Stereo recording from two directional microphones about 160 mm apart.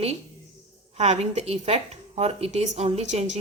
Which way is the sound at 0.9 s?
45° right (ahead or behind).